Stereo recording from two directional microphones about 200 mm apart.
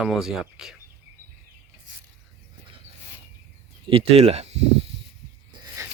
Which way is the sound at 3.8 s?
30° right (ahead or behind).